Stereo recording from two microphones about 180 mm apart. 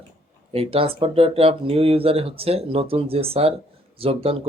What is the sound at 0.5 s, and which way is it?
Speech, 30° right (ahead or behind).